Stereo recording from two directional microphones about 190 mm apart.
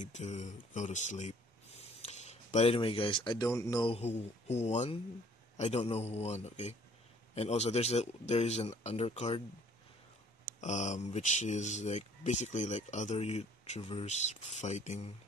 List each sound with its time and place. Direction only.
0.0 s speech: 40° left (ahead or behind); by 3.9 s 20° left (ahead or behind)
3.9 s speech: 35° left (ahead or behind)
10.6 s speech: 40° left (ahead or behind)